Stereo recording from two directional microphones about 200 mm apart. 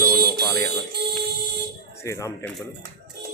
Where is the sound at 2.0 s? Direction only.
15° left (ahead or behind).